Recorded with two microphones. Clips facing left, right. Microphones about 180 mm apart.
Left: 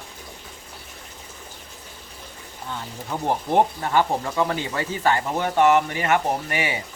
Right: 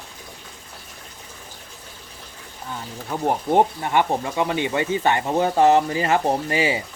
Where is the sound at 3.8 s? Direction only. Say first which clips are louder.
Right 1 dB; 20° right (ahead or behind).